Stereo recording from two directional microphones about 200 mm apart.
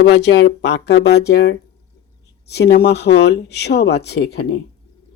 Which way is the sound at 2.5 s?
50° left (ahead or behind).